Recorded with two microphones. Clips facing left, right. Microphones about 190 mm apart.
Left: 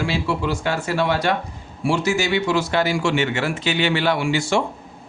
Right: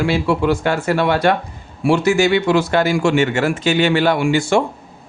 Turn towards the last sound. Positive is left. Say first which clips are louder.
# right 5 dB
turn(degrees=-50)  # may be behind; listen again after turning